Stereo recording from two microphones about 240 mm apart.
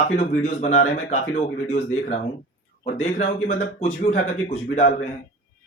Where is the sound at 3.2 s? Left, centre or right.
Left.